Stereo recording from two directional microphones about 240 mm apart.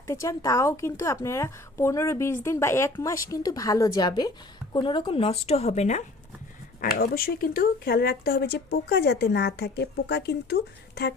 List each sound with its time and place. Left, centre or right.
0.1 s a woman's voice: centre; by 11.1 s left